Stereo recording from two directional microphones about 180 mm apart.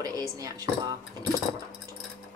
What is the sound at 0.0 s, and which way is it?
Speech, 20° right (ahead or behind).